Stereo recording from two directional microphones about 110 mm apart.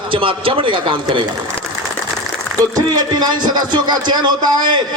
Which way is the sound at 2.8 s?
35° right (ahead or behind).